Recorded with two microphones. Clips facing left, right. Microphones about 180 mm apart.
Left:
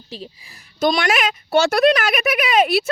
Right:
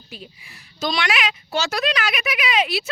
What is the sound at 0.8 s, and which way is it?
A woman's voice, 50° left (ahead or behind).